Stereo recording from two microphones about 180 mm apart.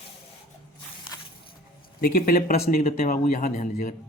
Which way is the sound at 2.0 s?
55° left (ahead or behind).